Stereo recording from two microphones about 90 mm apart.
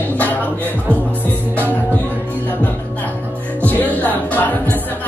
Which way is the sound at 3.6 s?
20° left (ahead or behind).